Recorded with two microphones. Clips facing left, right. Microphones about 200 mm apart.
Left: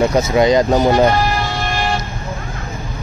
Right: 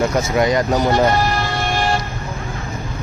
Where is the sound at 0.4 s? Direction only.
25° left (ahead or behind).